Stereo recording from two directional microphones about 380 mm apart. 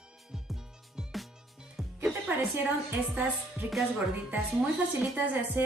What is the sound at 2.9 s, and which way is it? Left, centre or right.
Speech, centre.